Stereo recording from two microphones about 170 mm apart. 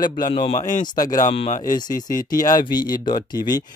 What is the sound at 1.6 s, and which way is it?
Speech, 25° left (ahead or behind).